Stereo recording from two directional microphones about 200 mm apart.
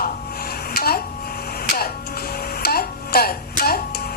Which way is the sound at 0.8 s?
50° left (ahead or behind).